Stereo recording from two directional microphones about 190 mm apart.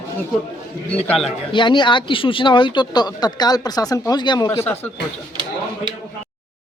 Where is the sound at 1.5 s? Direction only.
25° left (ahead or behind).